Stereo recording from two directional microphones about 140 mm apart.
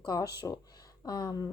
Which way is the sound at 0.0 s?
25° left (ahead or behind).